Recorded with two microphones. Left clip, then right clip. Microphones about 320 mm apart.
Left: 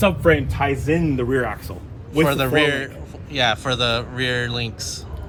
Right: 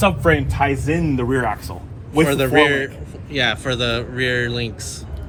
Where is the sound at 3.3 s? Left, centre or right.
Centre.